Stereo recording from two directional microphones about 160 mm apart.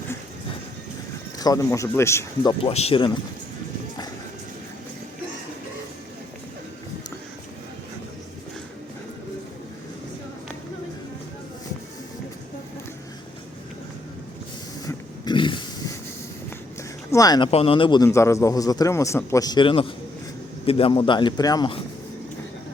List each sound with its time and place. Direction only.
1.4 s a man's voice: 20° left (ahead or behind)
2.7 s speech: 35° left (ahead or behind)
14.8 s grunt: 25° left (ahead or behind)
17.1 s speech: 20° left (ahead or behind)
17.5 s a man's voice: 35° left (ahead or behind)